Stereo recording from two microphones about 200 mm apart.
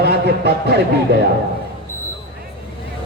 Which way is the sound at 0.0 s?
50° right (ahead or behind).